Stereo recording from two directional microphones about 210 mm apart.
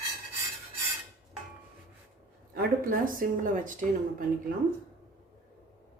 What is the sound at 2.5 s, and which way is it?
Speech, 40° right (ahead or behind).